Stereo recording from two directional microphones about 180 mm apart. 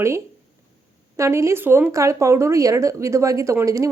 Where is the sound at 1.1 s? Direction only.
15° right (ahead or behind).